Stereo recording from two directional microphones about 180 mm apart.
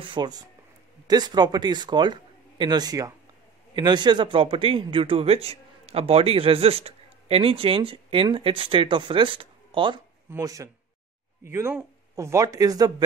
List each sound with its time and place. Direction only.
0.0 s a man's voice: 25° right (ahead or behind)
10.3 s speech: 15° right (ahead or behind)